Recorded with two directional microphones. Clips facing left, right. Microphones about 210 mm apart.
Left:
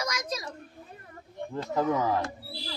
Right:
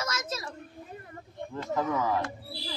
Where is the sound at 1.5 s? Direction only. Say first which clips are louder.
Left 2 dB; 35° left (ahead or behind).